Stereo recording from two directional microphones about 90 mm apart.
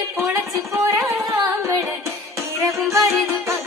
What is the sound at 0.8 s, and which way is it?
Carnatic music, 30° right (ahead or behind).